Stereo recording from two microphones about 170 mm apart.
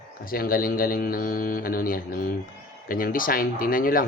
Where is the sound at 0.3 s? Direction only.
60° left (ahead or behind).